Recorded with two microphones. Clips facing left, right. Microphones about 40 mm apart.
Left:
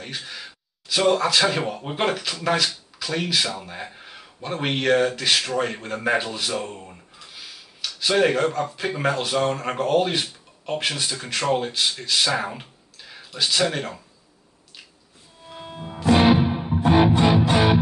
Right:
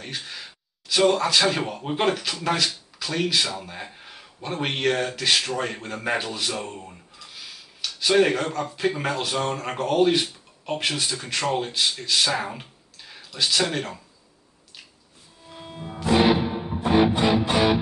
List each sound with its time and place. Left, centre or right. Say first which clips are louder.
0.0 s speech: left 1 dB; centre
15.5 s music: left 1 dB; centre